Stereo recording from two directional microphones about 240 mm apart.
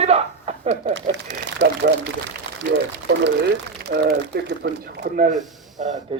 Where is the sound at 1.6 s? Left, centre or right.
Right.